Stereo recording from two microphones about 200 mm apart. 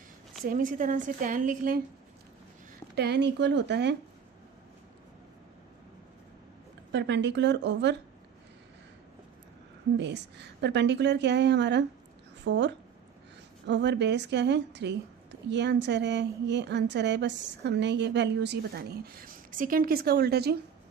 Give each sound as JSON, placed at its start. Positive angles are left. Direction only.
{"t": 0.4, "sound": "a woman's voice", "side_deg": -45}
{"t": 2.9, "sound": "a woman's voice", "side_deg": -60}
{"t": 6.9, "sound": "a woman's voice", "side_deg": -65}
{"t": 10.0, "sound": "a woman's voice", "side_deg": -60}